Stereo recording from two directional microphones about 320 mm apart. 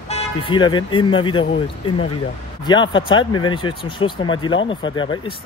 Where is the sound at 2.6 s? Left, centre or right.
Centre.